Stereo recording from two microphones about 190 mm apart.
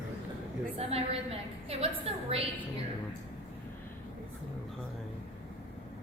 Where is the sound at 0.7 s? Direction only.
30° right (ahead or behind).